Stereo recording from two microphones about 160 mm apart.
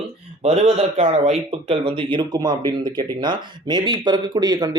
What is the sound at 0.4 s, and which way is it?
Speech, 40° right (ahead or behind).